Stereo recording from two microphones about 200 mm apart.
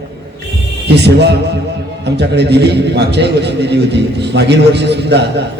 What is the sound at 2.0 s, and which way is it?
A man's voice, 55° right (ahead or behind).